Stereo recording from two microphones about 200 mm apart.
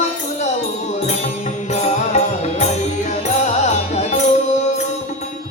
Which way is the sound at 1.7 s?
35° left (ahead or behind).